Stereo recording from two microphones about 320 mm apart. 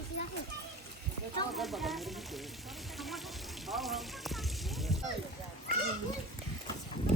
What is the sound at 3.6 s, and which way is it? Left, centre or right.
Rain on surface, centre.